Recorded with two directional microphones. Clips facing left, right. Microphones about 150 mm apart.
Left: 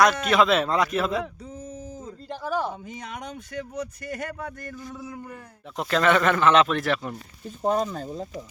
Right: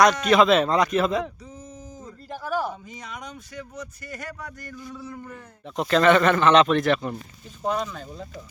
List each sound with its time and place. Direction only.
0.0 s speech: 5° left (ahead or behind)
2.8 s speech: 60° left (ahead or behind); by 5.0 s 45° left (ahead or behind)
5.2 s speech: 5° left (ahead or behind)
7.6 s speech: 45° left (ahead or behind)